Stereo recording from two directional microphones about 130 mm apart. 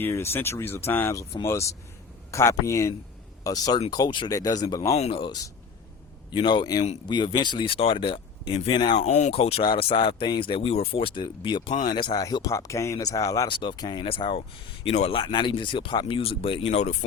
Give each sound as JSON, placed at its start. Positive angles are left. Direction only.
{"t": 0.0, "sound": "speech", "side_deg": 20}
{"t": 4.9, "sound": "speech", "side_deg": 55}
{"t": 5.2, "sound": "speech", "side_deg": 30}
{"t": 9.0, "sound": "speech", "side_deg": 60}
{"t": 15.2, "sound": "speech", "side_deg": 35}